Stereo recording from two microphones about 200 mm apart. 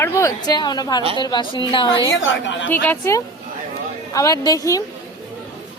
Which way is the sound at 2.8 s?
15° left (ahead or behind).